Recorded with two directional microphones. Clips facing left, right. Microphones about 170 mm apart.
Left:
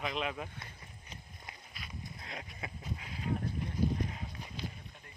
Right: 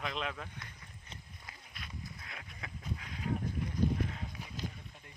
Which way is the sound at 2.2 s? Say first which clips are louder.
Left 4 dB; 25° left (ahead or behind).